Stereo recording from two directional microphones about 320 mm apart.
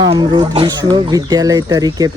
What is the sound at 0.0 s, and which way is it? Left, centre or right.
Speech, centre.